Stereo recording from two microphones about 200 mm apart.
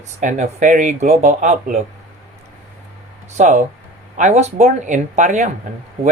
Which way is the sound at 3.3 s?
35° right (ahead or behind).